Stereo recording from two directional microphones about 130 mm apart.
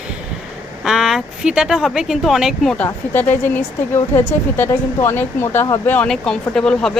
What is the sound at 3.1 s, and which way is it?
A woman's voice, 15° left (ahead or behind).